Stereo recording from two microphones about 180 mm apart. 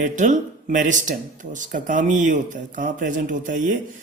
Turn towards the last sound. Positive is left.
turn(degrees=-45)  # may be behind; listen again after turning